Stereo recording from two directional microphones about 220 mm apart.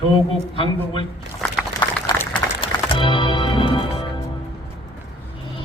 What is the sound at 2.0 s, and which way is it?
Music, 20° left (ahead or behind).